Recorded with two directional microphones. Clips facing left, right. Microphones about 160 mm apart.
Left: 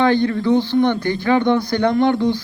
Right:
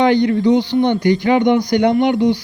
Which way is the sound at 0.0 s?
15° right (ahead or behind).